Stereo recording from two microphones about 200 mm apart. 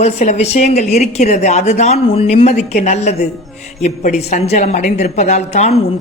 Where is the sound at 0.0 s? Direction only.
35° left (ahead or behind).